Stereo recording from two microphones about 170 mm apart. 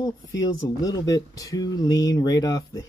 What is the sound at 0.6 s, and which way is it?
Speech, 20° left (ahead or behind).